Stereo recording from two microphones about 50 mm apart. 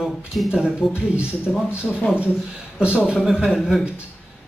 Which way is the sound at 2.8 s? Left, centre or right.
Right.